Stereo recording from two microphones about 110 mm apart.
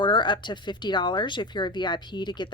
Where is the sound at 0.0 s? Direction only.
45° left (ahead or behind).